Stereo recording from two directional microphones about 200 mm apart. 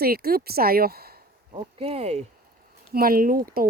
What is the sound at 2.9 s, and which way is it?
Speech, 45° right (ahead or behind).